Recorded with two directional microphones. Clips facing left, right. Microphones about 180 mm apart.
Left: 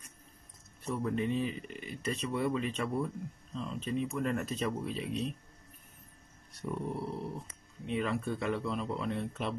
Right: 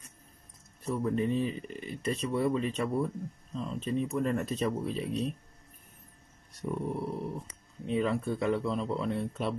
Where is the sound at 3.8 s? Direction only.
40° right (ahead or behind).